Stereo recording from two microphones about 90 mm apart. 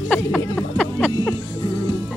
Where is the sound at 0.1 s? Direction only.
15° left (ahead or behind).